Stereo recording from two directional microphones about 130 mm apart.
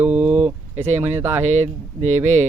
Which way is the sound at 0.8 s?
60° right (ahead or behind).